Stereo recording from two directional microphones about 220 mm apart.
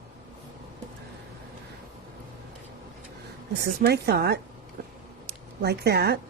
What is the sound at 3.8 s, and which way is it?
Speech, 45° right (ahead or behind).